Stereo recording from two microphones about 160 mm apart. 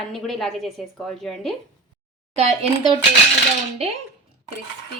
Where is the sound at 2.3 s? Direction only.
40° right (ahead or behind).